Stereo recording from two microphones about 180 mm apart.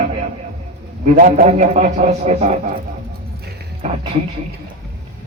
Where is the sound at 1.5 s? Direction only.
40° right (ahead or behind).